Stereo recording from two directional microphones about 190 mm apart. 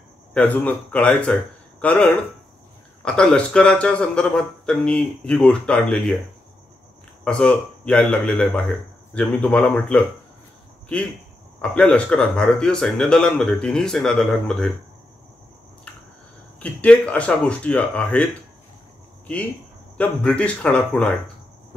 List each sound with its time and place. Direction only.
0.3 s a man's voice: 10° left (ahead or behind)
7.2 s a man's voice: 5° left (ahead or behind)
11.7 s a man's voice: 5° left (ahead or behind)
16.5 s speech: 5° left (ahead or behind)
20.0 s speech: 5° left (ahead or behind)